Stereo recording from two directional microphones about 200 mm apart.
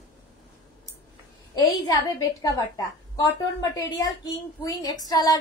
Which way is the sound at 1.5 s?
15° left (ahead or behind).